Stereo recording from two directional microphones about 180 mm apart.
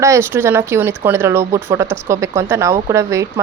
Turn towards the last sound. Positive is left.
turn(degrees=-15)  # may be behind; listen again after turning